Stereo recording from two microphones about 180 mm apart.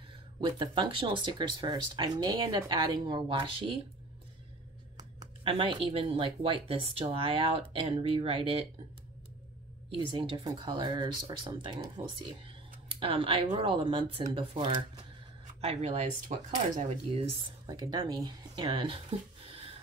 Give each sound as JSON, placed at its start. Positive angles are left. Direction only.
{"t": 0.4, "sound": "speech", "side_deg": -25}
{"t": 4.9, "sound": "speech", "side_deg": -25}
{"t": 9.8, "sound": "speech", "side_deg": -30}